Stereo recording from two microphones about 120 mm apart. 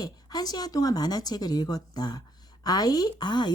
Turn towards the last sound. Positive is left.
turn(degrees=35)  # may be behind; listen again after turning